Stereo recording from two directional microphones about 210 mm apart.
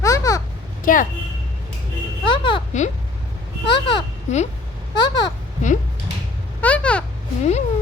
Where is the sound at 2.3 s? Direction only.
25° left (ahead or behind).